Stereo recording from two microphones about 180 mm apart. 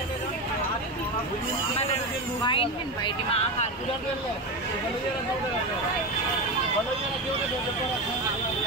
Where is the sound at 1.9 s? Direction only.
30° left (ahead or behind).